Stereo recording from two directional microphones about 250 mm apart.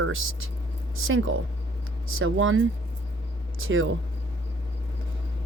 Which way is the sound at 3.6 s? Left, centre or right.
Right.